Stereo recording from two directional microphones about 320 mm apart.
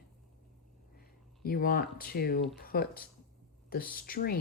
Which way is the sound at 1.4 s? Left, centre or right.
Left.